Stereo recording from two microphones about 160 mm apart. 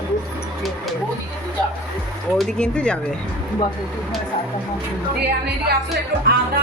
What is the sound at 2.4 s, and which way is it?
Speech, 5° left (ahead or behind).